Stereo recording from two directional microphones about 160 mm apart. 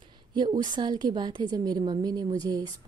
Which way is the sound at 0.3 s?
25° right (ahead or behind).